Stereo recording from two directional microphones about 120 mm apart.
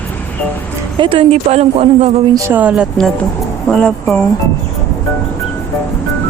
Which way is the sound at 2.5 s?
10° right (ahead or behind).